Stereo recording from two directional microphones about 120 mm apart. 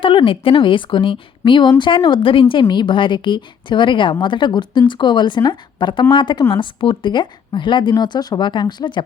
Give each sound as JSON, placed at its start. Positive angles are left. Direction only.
{"t": 0.0, "sound": "a woman's voice", "side_deg": 45}